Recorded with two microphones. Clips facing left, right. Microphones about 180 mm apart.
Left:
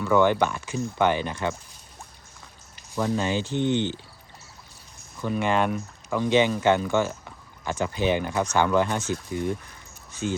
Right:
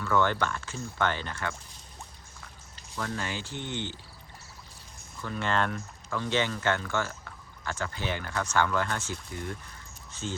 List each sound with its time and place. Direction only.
0.0 s speech: 15° left (ahead or behind)
2.7 s speech: 15° left (ahead or behind)
5.2 s speech: 15° left (ahead or behind)